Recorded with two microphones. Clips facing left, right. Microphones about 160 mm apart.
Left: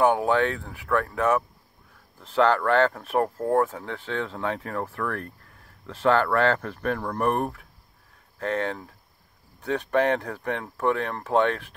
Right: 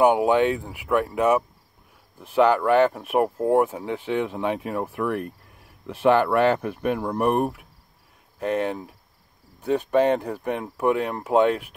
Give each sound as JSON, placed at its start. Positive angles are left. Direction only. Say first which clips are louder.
{"t": 0.0, "sound": "speech", "louder": "right 3 dB", "side_deg": -15}